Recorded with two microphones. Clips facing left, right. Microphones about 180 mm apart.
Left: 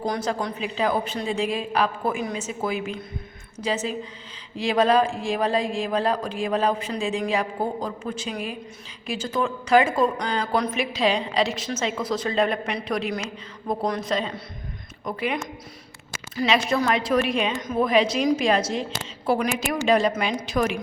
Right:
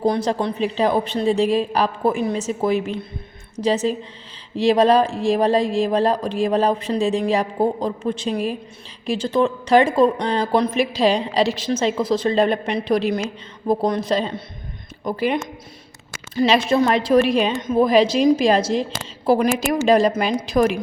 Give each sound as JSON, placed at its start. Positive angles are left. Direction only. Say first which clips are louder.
{"t": 0.0, "sound": "a woman's voice", "louder": "right 6 dB", "side_deg": -30}